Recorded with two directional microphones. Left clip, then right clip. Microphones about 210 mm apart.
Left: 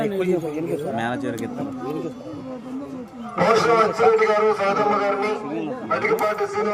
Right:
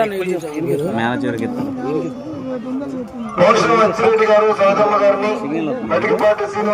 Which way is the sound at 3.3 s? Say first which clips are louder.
Right 5 dB; 50° left (ahead or behind).